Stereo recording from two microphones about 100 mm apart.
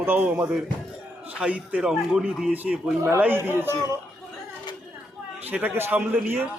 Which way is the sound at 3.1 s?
20° right (ahead or behind).